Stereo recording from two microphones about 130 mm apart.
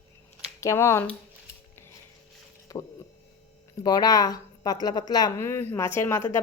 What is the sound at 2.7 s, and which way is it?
Speech, 30° left (ahead or behind).